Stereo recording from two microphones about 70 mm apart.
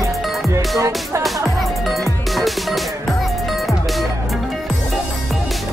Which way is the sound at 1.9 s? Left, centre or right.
Centre.